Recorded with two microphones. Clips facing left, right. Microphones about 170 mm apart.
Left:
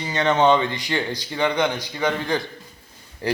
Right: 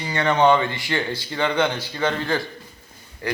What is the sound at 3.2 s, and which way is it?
Speech, 30° left (ahead or behind).